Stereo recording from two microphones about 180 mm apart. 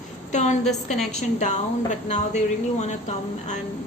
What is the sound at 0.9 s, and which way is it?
A woman's voice, 40° left (ahead or behind).